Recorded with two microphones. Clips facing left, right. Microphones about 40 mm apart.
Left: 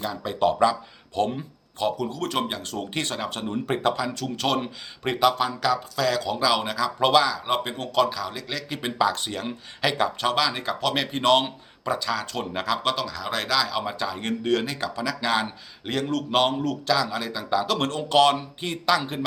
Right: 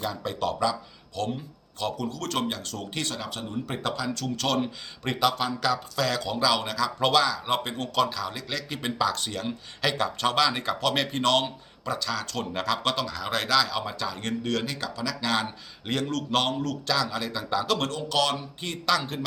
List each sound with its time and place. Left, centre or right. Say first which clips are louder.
0.0 s speech: left 5 dB; centre
0.6 s speech: left 6 dB; left
3.8 s speech: left 4 dB; centre
17.7 s speech: left 6 dB; left
18.6 s speech: left 3 dB; centre